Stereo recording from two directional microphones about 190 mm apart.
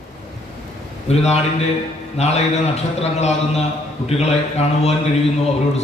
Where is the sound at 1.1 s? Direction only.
35° left (ahead or behind).